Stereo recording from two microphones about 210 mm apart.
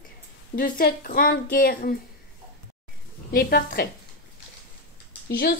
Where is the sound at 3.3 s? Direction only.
45° left (ahead or behind).